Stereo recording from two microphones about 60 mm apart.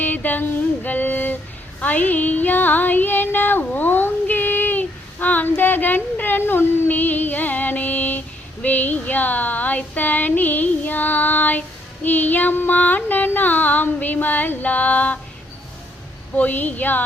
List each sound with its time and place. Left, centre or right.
0.0 s a sound: left
1.8 s music: left
3.6 s child singing: left
6.8 s female singing: left
8.6 s a sound: left
12.0 s music: left
16.3 s music: left